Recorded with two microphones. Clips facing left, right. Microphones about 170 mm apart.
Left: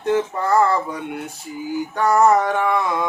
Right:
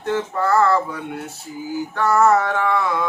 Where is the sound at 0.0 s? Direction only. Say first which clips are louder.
Left 2 dB; 15° left (ahead or behind).